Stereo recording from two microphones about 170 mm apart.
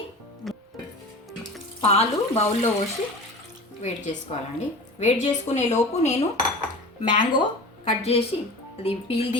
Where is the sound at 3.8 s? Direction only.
45° left (ahead or behind).